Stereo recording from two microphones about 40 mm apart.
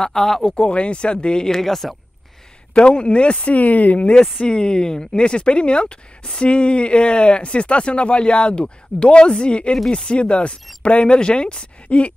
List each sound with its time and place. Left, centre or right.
0.0 s speech: centre
0.5 s speech: left; by 2.0 s centre
2.7 s speech: left
3.5 s speech: left
4.0 s speech: left